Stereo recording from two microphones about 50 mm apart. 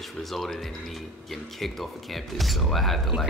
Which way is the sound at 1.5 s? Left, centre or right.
Centre.